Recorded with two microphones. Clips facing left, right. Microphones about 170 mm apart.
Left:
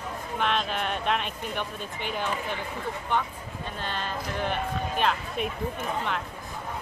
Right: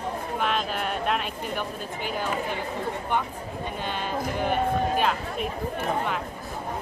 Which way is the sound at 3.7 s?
10° right (ahead or behind).